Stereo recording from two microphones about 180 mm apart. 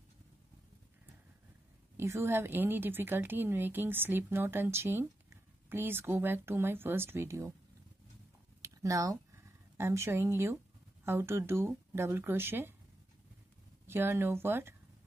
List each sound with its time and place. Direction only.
2.0 s a woman's voice: 15° right (ahead or behind)
8.6 s a woman's voice: 15° right (ahead or behind)
13.8 s a woman's voice: 10° right (ahead or behind)